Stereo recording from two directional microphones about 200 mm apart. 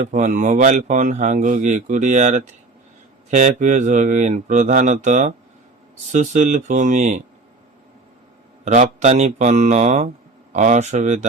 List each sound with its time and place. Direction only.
0.0 s speech: 40° right (ahead or behind)
8.6 s speech: 35° right (ahead or behind)